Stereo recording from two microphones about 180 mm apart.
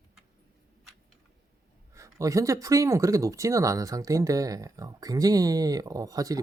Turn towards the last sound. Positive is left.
turn(degrees=-20)  # may be behind; listen again after turning